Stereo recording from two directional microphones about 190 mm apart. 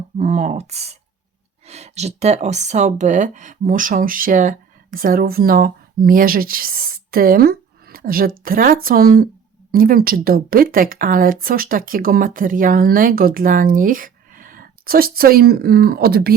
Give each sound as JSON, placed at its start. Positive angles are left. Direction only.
{"t": 0.2, "sound": "speech", "side_deg": -40}